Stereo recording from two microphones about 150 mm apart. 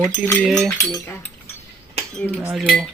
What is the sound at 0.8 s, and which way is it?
Speech, 20° left (ahead or behind).